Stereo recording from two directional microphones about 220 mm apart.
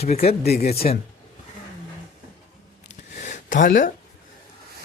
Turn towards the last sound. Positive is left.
turn(degrees=35)  # may be behind; listen again after turning